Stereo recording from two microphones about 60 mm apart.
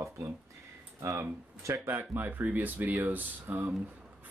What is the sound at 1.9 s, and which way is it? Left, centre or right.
Speech, right.